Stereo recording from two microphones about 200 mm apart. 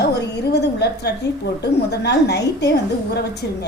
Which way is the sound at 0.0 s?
55° left (ahead or behind).